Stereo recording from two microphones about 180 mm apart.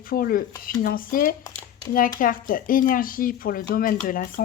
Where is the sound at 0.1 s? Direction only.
55° left (ahead or behind).